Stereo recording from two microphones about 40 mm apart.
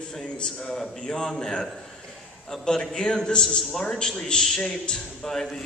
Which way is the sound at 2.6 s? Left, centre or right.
Centre.